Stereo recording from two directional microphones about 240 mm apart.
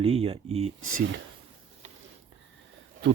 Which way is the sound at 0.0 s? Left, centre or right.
Right.